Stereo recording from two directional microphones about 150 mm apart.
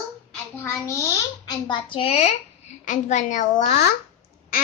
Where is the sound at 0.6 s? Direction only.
20° left (ahead or behind); by 2.3 s 40° left (ahead or behind).